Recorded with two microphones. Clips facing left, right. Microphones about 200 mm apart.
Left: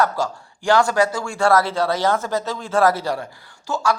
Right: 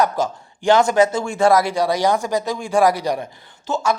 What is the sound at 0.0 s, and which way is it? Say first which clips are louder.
A man's voice: right 2 dB; 20° right (ahead or behind).